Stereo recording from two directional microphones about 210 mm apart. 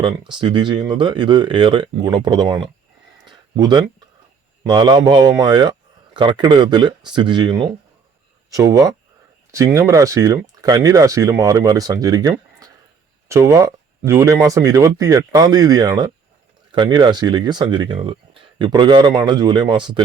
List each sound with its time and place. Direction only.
0.0 s speech: 20° right (ahead or behind)
3.2 s a sound: 20° right (ahead or behind)
4.6 s speech: 20° right (ahead or behind)